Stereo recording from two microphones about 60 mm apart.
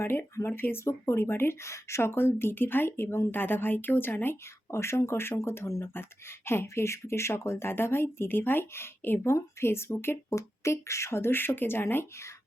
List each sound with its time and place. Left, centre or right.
0.0 s speech: left
2.0 s speech: left
4.7 s speech: left
5.8 s speech: left
10.2 s speech: left